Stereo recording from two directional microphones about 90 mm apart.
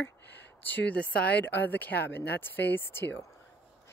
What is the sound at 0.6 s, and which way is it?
Speech, 15° left (ahead or behind).